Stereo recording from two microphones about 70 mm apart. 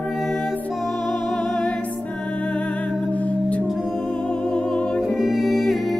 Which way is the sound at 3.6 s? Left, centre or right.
Centre.